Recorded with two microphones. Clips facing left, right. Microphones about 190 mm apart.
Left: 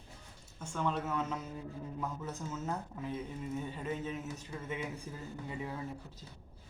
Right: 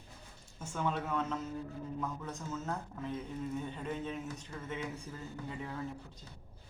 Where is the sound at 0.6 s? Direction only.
5° right (ahead or behind).